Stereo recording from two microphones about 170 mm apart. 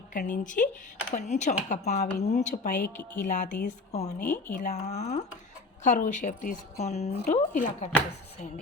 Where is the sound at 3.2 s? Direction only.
55° left (ahead or behind).